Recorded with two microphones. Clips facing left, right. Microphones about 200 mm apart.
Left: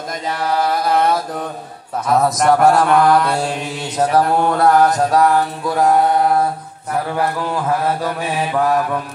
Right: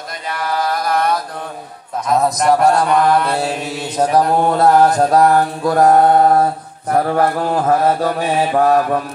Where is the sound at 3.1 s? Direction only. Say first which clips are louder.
Even; centre (ahead or behind).